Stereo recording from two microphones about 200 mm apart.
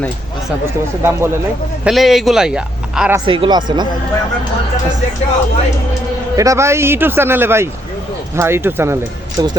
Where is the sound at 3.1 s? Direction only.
25° right (ahead or behind).